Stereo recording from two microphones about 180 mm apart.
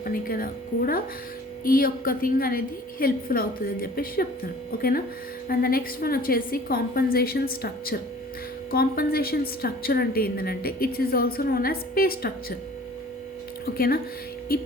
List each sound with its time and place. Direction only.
0.0 s a woman's voice: 50° left (ahead or behind)
13.7 s a woman's voice: 55° left (ahead or behind)